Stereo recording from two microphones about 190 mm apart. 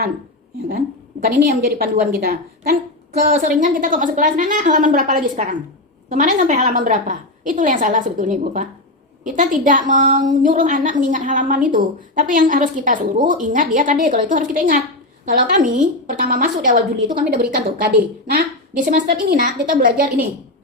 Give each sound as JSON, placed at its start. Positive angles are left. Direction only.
{"t": 1.2, "sound": "a woman's voice", "side_deg": -50}